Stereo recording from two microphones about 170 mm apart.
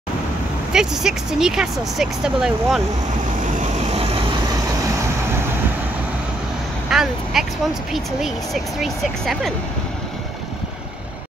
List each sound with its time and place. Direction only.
0.7 s speech: 5° right (ahead or behind)
3.5 s vehicle: 35° right (ahead or behind)
6.9 s speech: 5° right (ahead or behind)
8.8 s speech: centre (ahead or behind)